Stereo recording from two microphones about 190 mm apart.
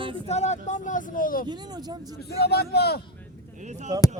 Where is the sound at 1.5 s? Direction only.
20° right (ahead or behind).